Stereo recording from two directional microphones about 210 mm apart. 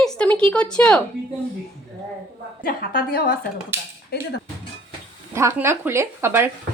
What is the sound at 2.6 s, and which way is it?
Speech, 45° left (ahead or behind).